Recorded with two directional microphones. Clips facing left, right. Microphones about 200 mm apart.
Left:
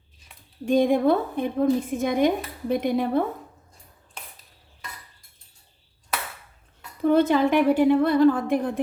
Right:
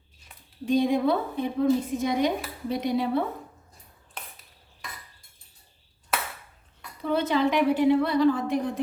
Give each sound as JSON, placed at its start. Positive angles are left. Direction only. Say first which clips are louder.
{"t": 0.6, "sound": "a woman's voice", "louder": "left 3 dB", "side_deg": 50}
{"t": 7.0, "sound": "a woman's voice", "louder": "left 5 dB", "side_deg": 50}